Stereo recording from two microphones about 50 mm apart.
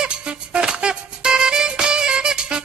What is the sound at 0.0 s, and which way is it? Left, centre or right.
Music, centre.